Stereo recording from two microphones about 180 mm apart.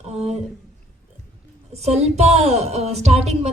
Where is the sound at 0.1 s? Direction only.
35° right (ahead or behind).